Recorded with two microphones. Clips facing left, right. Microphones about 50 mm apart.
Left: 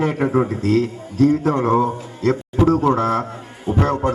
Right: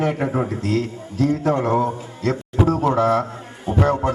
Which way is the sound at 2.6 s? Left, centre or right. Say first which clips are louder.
Left 3 dB; centre.